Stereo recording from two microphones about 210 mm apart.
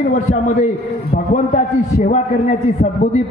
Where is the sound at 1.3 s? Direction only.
35° left (ahead or behind).